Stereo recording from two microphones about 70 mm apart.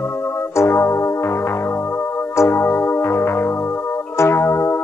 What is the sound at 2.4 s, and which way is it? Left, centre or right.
Music, left.